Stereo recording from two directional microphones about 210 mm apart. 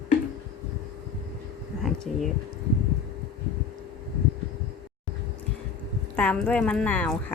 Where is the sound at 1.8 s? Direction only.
Centre (ahead or behind).